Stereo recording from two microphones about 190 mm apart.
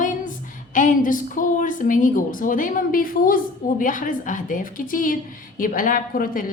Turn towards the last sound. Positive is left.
turn(degrees=45)  # may be behind; listen again after turning